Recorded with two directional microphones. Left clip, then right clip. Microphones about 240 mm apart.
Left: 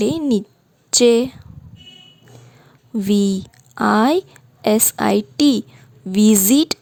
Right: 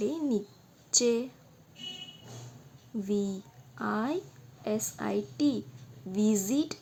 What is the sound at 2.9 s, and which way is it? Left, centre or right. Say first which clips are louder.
A woman's voice: left 13 dB; left.